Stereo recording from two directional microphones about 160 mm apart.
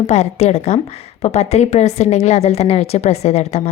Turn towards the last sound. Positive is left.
turn(degrees=40)  # may be behind; listen again after turning